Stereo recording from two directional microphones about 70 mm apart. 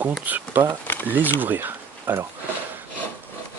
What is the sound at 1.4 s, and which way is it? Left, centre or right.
Speech, right.